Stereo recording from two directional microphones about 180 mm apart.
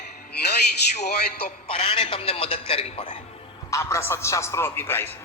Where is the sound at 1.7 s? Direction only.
30° left (ahead or behind).